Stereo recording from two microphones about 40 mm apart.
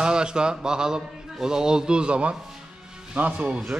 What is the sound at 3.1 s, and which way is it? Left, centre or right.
Speech, right.